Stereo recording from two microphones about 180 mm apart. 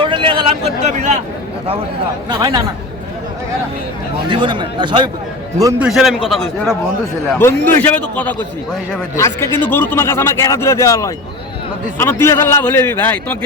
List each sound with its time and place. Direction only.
0.0 s a sound: 25° right (ahead or behind)
2.4 s a man's voice: 20° right (ahead or behind)
4.3 s a man's voice: 25° right (ahead or behind)
5.8 s a man's voice: centre (ahead or behind)
7.3 s speech: 10° left (ahead or behind)